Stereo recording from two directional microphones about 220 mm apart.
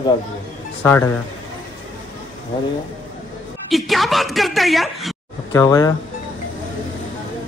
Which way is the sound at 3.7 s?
Centre (ahead or behind).